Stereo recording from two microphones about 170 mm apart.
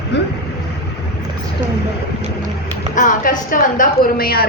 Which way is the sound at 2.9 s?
50° left (ahead or behind).